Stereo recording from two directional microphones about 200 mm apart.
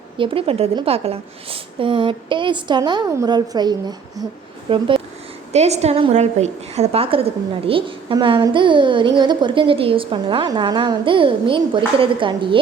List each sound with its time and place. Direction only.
0.2 s a woman's voice: 25° right (ahead or behind)